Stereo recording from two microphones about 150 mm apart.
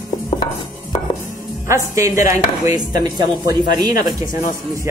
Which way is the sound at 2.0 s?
20° right (ahead or behind).